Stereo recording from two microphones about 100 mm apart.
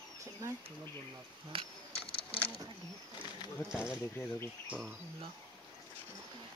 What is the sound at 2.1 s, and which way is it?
Bird, 65° left (ahead or behind).